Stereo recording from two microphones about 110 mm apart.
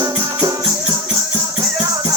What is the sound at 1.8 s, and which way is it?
Music, 30° right (ahead or behind).